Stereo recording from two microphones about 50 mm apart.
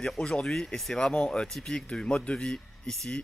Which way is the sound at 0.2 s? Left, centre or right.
Centre.